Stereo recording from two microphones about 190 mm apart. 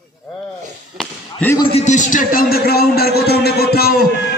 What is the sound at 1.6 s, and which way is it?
Speech, 35° left (ahead or behind).